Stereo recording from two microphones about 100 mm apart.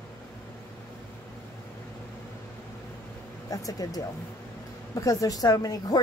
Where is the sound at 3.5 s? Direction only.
35° left (ahead or behind).